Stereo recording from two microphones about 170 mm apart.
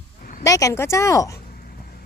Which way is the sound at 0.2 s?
50° left (ahead or behind).